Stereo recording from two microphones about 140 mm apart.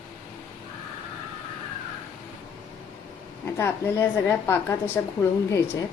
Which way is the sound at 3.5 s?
15° left (ahead or behind).